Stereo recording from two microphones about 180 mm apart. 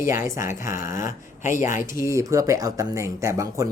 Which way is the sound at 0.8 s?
45° left (ahead or behind).